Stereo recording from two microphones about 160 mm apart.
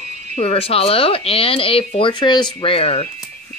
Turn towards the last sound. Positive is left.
turn(degrees=35)  # may be behind; listen again after turning